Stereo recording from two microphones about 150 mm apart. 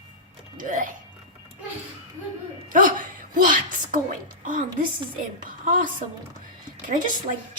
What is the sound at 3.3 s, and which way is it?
A woman's voice, 65° right (ahead or behind).